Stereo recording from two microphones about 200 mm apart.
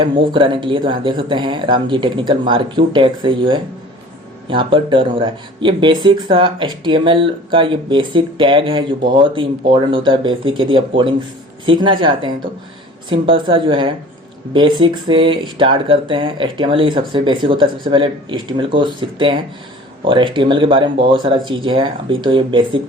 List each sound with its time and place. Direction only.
0.0 s speech: 25° right (ahead or behind)